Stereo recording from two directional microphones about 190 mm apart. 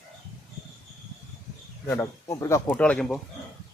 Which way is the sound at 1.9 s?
15° left (ahead or behind).